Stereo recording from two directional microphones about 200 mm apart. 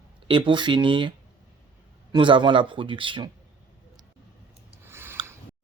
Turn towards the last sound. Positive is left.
turn(degrees=-10)  # may be behind; listen again after turning